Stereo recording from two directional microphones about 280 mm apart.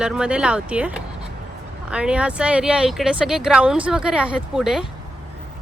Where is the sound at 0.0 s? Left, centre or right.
Centre.